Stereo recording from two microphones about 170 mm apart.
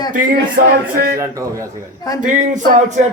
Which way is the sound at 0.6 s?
55° right (ahead or behind).